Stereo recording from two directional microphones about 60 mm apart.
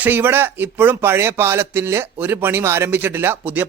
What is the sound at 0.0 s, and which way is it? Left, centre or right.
Speech, right.